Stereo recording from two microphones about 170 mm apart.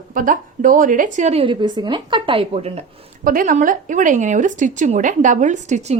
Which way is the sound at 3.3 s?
55° right (ahead or behind).